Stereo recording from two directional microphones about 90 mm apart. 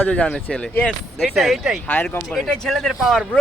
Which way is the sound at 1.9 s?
20° left (ahead or behind).